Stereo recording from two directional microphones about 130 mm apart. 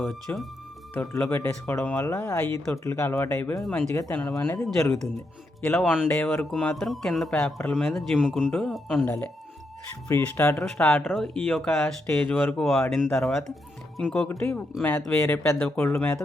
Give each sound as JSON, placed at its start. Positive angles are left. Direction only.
{"t": 0.0, "sound": "speech", "side_deg": 5}
{"t": 1.3, "sound": "speech", "side_deg": 20}
{"t": 4.4, "sound": "speech", "side_deg": 25}
{"t": 5.6, "sound": "speech", "side_deg": 10}
{"t": 8.2, "sound": "speech", "side_deg": 0}
{"t": 9.0, "sound": "speech", "side_deg": 10}
{"t": 10.1, "sound": "speech", "side_deg": 20}
{"t": 14.3, "sound": "speech", "side_deg": 15}